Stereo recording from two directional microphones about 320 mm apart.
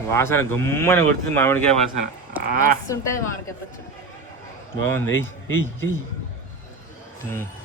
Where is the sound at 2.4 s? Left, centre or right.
Right.